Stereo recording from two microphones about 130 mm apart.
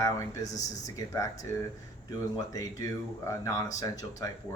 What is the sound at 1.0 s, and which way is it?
Speech, 25° left (ahead or behind).